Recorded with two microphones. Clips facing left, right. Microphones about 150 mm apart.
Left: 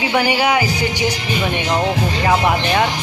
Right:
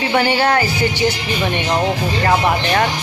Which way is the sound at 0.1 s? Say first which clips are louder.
Right 1 dB; 10° left (ahead or behind).